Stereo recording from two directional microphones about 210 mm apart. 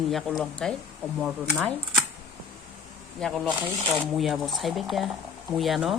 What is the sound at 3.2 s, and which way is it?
Speech, centre (ahead or behind).